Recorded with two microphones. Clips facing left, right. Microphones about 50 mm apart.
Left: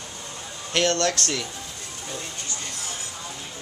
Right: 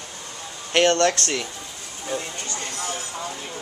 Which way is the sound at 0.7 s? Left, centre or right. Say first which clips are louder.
Right 4 dB; right.